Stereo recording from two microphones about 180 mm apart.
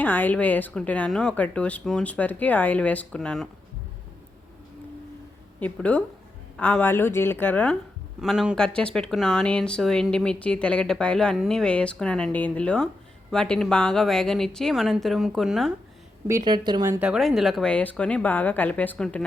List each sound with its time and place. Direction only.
0.0 s speech: 10° left (ahead or behind)
5.5 s speech: 10° left (ahead or behind)
8.2 s speech: centre (ahead or behind)
16.2 s speech: 20° right (ahead or behind)
17.0 s speech: 5° right (ahead or behind)